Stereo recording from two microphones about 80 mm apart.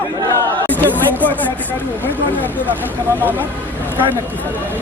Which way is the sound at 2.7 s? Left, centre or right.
Right.